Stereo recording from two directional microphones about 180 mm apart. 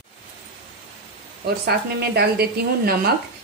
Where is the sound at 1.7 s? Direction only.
60° right (ahead or behind).